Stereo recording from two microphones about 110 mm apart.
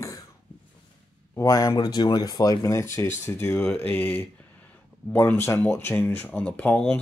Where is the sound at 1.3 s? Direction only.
30° left (ahead or behind).